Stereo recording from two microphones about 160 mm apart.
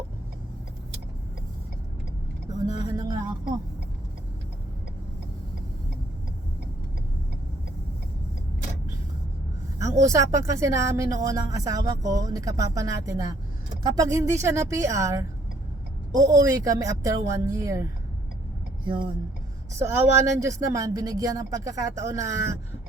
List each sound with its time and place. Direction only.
2.8 s a sound: 20° right (ahead or behind)
9.7 s speech: 20° right (ahead or behind)
19.8 s speech: 15° right (ahead or behind)